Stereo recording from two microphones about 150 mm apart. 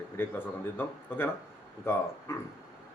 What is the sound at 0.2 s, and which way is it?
Speech, 15° left (ahead or behind).